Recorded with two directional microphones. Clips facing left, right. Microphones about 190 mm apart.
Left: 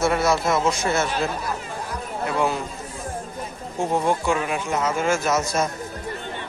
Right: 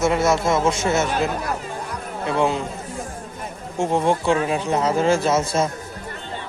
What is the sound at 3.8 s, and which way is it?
Speech, 25° right (ahead or behind).